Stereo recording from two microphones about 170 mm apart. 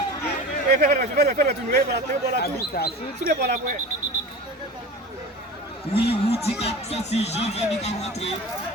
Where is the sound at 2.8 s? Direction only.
65° left (ahead or behind).